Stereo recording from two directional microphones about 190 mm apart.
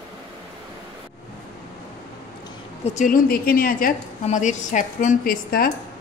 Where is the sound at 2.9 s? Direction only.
40° left (ahead or behind).